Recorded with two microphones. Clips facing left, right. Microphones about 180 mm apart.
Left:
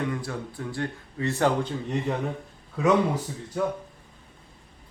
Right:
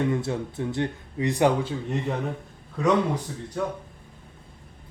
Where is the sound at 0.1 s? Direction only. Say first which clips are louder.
Right 5 dB; 25° right (ahead or behind).